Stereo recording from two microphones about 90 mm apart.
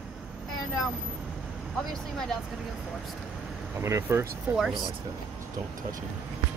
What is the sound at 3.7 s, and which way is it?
Speech, 30° right (ahead or behind).